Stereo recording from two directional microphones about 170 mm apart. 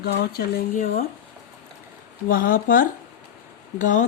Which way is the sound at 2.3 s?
55° left (ahead or behind).